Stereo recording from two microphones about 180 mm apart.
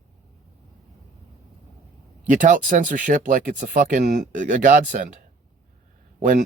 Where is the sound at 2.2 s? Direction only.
45° right (ahead or behind).